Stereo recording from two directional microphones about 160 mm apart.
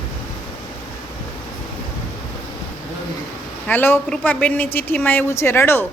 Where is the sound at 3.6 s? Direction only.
15° left (ahead or behind).